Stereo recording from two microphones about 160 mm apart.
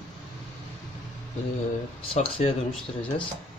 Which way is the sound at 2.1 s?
35° left (ahead or behind).